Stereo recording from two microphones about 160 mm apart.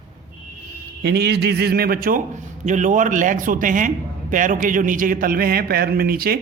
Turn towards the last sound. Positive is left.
turn(degrees=-70)  # may be behind; listen again after turning